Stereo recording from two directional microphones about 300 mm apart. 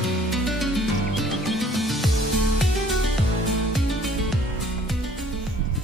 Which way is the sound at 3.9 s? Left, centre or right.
Centre.